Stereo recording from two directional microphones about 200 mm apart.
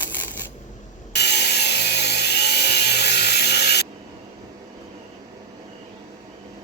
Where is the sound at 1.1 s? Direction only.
55° left (ahead or behind).